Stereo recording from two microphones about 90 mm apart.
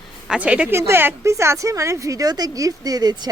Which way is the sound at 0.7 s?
30° right (ahead or behind).